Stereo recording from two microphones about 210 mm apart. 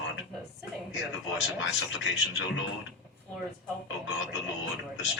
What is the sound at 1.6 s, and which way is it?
Speech, 60° left (ahead or behind).